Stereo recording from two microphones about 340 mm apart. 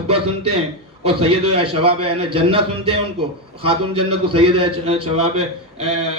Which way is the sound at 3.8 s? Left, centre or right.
Right.